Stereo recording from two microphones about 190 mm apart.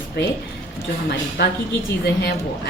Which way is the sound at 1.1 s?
55° left (ahead or behind).